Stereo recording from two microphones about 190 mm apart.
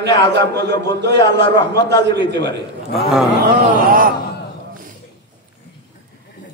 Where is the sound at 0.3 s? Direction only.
60° right (ahead or behind).